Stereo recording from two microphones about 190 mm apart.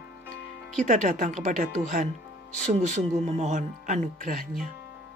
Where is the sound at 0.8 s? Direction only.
40° right (ahead or behind).